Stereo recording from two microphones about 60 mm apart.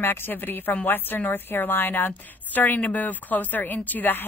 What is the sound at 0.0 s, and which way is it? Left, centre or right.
A woman's voice, left.